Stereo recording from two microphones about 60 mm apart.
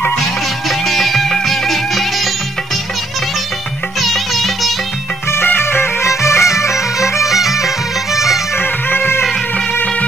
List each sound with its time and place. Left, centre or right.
0.7 s music: centre
4.0 s music: centre
5.6 s music: left
7.2 s music: centre
8.5 s music: left